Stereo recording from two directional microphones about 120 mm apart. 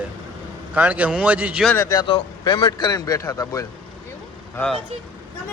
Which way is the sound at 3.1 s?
30° left (ahead or behind).